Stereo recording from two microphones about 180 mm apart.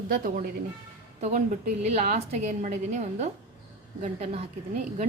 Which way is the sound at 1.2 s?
40° right (ahead or behind).